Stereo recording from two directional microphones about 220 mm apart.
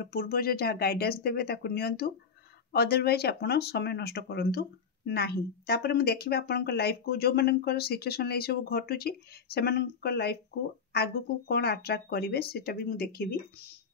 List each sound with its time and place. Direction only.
0.0 s speech: 40° left (ahead or behind)